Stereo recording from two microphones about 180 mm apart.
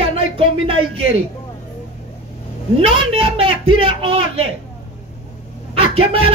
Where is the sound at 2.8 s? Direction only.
30° right (ahead or behind).